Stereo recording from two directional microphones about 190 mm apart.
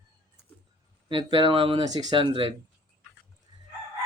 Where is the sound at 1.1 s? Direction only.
25° right (ahead or behind).